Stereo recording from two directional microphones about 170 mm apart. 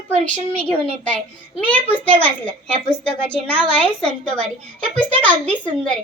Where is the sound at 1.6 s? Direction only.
10° left (ahead or behind).